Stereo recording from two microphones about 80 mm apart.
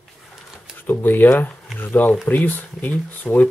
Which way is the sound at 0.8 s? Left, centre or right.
Left.